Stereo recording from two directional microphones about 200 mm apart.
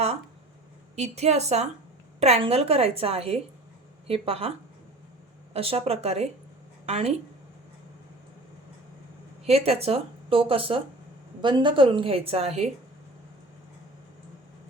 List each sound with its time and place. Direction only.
0.9 s a woman's voice: 35° right (ahead or behind)
5.5 s a woman's voice: 30° right (ahead or behind)
9.5 s speech: 30° right (ahead or behind)